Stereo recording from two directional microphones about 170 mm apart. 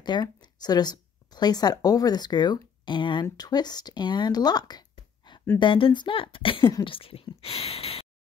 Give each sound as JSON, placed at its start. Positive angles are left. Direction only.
{"t": 0.0, "sound": "speech", "side_deg": 25}